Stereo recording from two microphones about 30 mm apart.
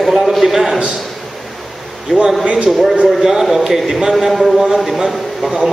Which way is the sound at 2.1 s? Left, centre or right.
Right.